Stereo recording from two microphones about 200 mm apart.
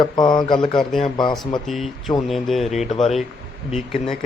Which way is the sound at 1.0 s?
25° left (ahead or behind).